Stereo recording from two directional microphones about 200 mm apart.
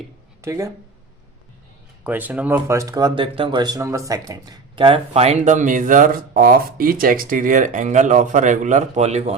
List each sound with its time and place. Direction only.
0.4 s speech: 15° right (ahead or behind)
2.0 s speech: 10° right (ahead or behind); by 9.3 s 35° right (ahead or behind)